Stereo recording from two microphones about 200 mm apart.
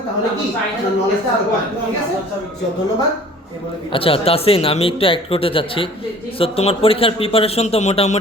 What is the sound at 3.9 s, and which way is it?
A man's voice, 25° left (ahead or behind).